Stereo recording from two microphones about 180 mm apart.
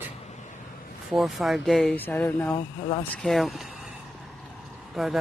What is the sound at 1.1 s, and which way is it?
Speech, centre (ahead or behind).